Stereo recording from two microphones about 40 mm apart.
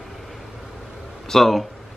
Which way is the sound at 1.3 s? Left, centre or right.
Centre.